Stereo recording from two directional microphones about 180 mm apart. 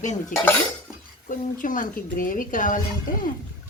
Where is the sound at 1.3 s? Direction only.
45° left (ahead or behind).